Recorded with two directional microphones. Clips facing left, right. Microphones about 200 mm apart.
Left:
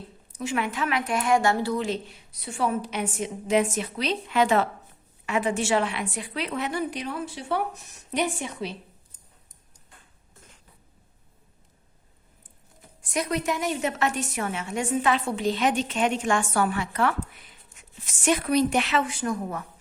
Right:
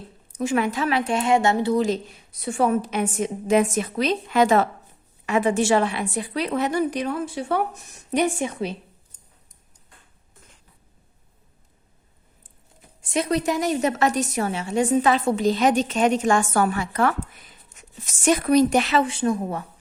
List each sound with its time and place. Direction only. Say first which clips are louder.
0.3 s a woman's voice: right 5 dB; 40° right (ahead or behind); by 1.7 s 20° right (ahead or behind)
1.7 s a woman's voice: right 6 dB; 40° right (ahead or behind)
13.0 s a woman's voice: right 5 dB; 25° right (ahead or behind)